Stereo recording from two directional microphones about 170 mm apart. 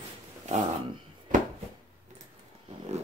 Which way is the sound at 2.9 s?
40° right (ahead or behind).